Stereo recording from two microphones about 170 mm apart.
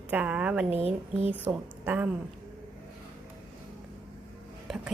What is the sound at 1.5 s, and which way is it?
Speech, 10° right (ahead or behind).